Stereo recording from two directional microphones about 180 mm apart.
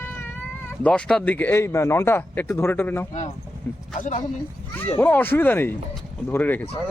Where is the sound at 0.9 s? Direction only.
5° left (ahead or behind).